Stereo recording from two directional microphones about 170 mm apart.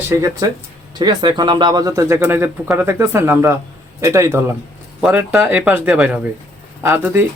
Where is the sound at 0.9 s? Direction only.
25° right (ahead or behind).